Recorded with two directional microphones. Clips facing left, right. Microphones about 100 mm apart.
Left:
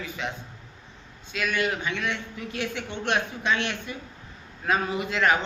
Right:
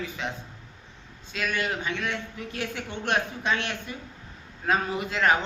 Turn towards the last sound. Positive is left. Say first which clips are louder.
# even
turn(degrees=-35)  # may be behind; listen again after turning